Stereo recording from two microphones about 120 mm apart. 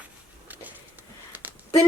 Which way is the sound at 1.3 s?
15° right (ahead or behind).